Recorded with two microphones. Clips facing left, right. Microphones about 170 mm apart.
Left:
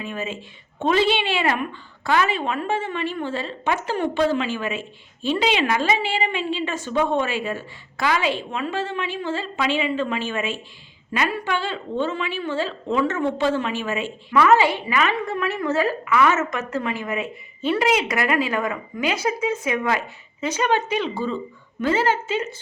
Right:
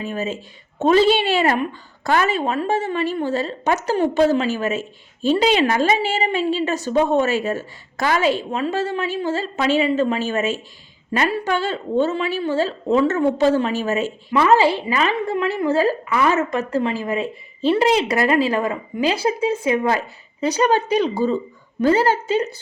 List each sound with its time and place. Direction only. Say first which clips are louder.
0.0 s a woman's voice: right 4 dB; 40° right (ahead or behind)